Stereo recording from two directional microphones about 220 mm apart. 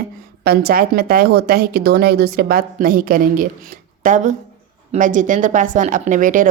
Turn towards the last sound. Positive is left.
turn(degrees=-35)  # may be behind; listen again after turning